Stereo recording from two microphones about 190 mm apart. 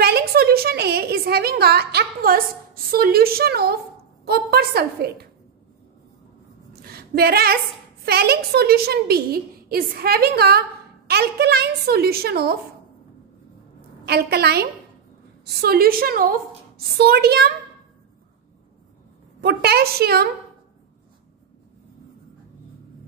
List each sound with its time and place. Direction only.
0.0 s a sound: 55° right (ahead or behind)
4.3 s a woman's voice: 55° right (ahead or behind)
6.7 s a sound: 55° right (ahead or behind)
8.0 s a woman's voice: 55° right (ahead or behind)
14.0 s a woman's voice: 60° right (ahead or behind)
19.4 s a woman's voice: 55° right (ahead or behind)